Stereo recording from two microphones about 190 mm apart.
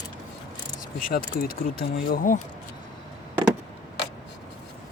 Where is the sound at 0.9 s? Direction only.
45° left (ahead or behind).